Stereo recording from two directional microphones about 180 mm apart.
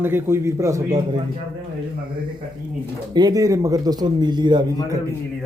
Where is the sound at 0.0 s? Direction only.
10° right (ahead or behind).